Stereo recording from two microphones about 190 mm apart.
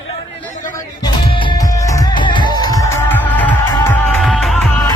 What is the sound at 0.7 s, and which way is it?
Music, 20° left (ahead or behind).